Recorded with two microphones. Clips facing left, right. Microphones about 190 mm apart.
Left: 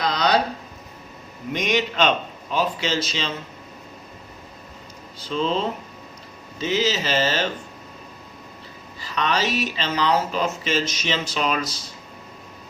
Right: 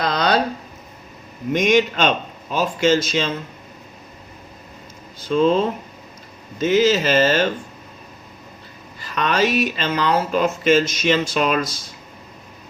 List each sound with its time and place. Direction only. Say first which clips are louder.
0.0 s a sound: right 2 dB; 55° right (ahead or behind)
1.5 s speech: right 5 dB; 50° right (ahead or behind)
5.2 s speech: right 7 dB; 50° right (ahead or behind)
9.0 s speech: right 4 dB; 50° right (ahead or behind)